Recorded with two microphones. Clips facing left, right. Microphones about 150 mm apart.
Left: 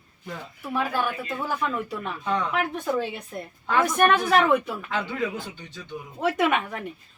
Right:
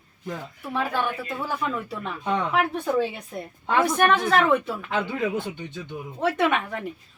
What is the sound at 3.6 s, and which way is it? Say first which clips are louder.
Speech: right 1 dB; 20° right (ahead or behind).